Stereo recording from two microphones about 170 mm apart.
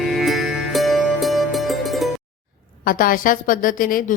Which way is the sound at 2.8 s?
55° left (ahead or behind).